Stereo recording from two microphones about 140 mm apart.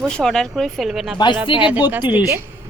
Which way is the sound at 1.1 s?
35° left (ahead or behind).